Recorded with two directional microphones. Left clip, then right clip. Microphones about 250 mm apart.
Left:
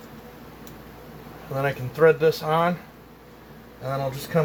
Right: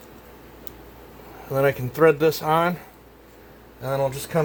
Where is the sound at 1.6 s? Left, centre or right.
Right.